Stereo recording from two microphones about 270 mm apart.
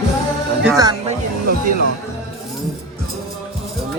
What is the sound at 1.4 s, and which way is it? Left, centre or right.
Music, right.